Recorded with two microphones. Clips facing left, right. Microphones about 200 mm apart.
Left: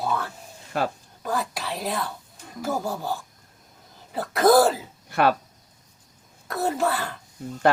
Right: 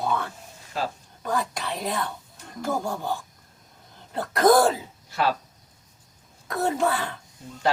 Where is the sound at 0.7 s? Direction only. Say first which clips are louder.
Left 4 dB; 60° left (ahead or behind).